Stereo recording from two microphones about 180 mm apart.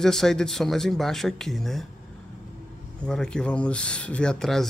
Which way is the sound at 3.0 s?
5° left (ahead or behind).